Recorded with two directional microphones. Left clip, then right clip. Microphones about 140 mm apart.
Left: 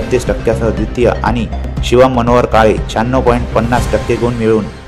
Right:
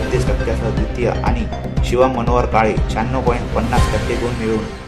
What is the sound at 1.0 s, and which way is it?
Speech, 50° left (ahead or behind).